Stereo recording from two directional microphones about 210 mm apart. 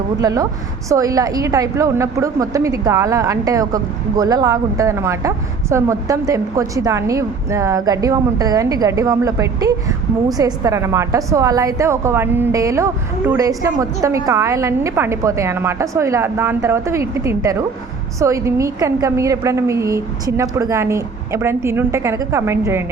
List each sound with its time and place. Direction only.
0.2 s a woman's voice: 15° right (ahead or behind)